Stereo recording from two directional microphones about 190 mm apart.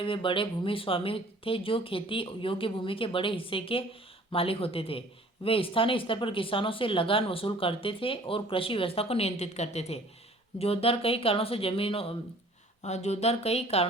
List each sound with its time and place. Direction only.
0.0 s speech: 25° left (ahead or behind)